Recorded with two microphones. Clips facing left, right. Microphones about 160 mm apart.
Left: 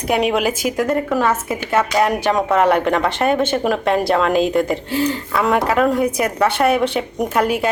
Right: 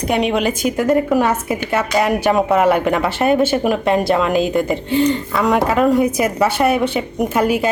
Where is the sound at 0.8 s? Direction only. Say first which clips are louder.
Right 5 dB; 15° right (ahead or behind).